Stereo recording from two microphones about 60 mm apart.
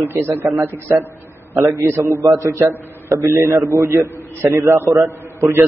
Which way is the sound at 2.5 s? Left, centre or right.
Right.